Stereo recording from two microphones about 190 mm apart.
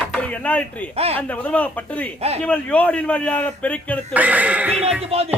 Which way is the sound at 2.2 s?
35° right (ahead or behind).